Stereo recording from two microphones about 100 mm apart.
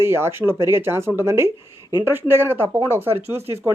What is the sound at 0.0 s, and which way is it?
Speech, 25° right (ahead or behind).